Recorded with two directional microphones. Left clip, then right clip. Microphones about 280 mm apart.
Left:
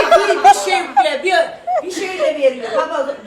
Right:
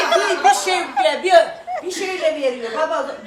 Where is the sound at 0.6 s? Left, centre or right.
Right.